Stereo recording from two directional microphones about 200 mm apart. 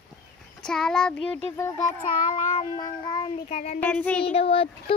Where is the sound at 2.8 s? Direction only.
20° left (ahead or behind).